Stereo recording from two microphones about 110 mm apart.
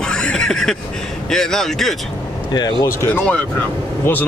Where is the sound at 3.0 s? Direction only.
15° left (ahead or behind).